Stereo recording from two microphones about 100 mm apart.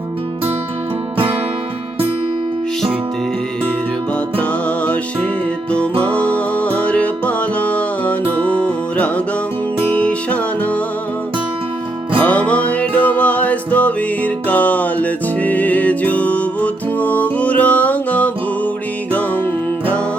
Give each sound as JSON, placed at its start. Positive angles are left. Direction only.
{"t": 5.7, "sound": "music", "side_deg": 10}
{"t": 12.2, "sound": "music", "side_deg": 15}